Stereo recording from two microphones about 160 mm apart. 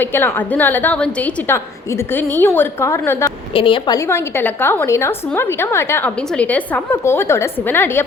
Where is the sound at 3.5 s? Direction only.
35° left (ahead or behind).